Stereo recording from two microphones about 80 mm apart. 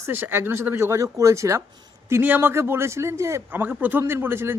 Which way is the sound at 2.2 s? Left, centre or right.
Right.